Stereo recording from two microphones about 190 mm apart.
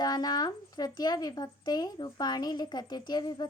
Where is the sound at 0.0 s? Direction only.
20° left (ahead or behind).